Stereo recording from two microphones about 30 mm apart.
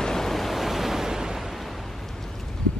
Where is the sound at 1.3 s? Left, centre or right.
Centre.